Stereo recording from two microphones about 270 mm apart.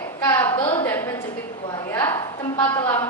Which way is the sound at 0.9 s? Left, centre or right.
Centre.